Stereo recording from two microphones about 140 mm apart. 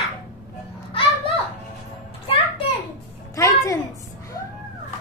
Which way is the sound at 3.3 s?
25° left (ahead or behind).